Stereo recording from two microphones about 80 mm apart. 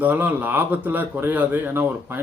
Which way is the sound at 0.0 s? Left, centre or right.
Right.